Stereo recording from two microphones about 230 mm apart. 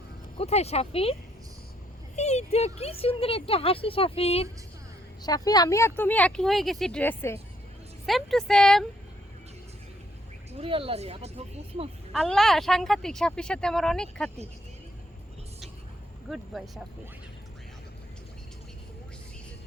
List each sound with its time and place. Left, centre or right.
0.3 s speech: left
2.1 s speech: left; by 8.8 s centre
10.6 s speech: right
12.1 s speech: centre
16.3 s speech: centre